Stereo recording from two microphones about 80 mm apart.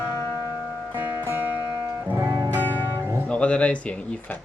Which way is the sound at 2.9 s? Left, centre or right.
Right.